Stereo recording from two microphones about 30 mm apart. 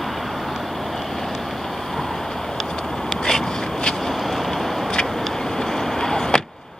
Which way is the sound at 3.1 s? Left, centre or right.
Centre.